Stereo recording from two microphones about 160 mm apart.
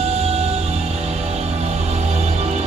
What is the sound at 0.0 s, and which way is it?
Music, 40° right (ahead or behind).